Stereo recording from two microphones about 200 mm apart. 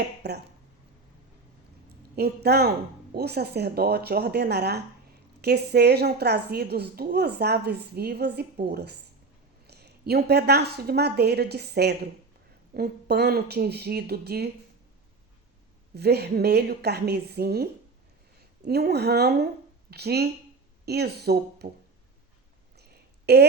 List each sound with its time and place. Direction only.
0.2 s speech: 55° right (ahead or behind)
2.1 s a woman's voice: 55° right (ahead or behind)
16.0 s a woman's voice: 55° right (ahead or behind)
22.8 s a sound: 55° right (ahead or behind)